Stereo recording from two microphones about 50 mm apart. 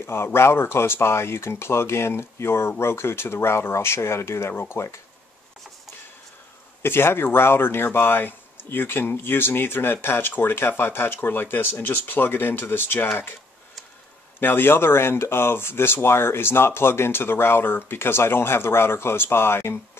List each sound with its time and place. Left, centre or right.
0.0 s speech: left
6.8 s speech: left
14.4 s speech: left